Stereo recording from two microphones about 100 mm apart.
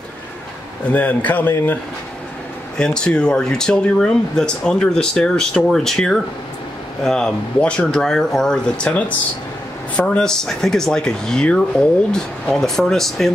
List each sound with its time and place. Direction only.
0.8 s speech: 15° left (ahead or behind)
2.8 s speech: 10° left (ahead or behind)